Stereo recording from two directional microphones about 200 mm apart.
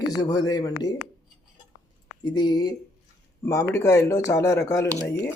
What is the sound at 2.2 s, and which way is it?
Speech, 20° left (ahead or behind).